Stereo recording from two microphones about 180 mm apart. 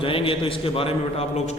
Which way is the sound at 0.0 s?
30° left (ahead or behind).